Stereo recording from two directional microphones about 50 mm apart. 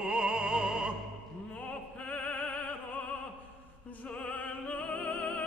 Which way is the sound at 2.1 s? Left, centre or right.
Left.